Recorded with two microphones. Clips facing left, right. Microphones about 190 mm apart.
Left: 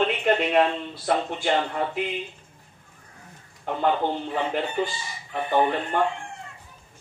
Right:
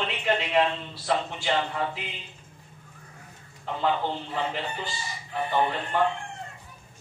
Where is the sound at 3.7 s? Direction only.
55° left (ahead or behind).